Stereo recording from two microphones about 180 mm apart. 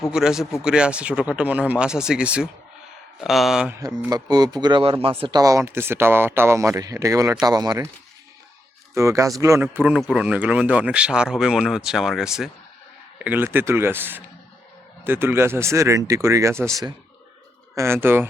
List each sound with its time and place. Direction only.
0.1 s speech: 5° right (ahead or behind)
3.8 s speech: 20° right (ahead or behind)
9.0 s speech: 15° right (ahead or behind)